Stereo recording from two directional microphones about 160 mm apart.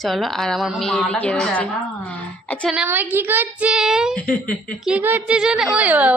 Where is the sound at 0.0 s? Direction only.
Centre (ahead or behind).